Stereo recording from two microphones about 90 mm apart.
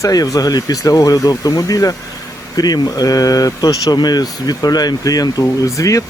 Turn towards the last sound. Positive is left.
turn(degrees=35)  # may be behind; listen again after turning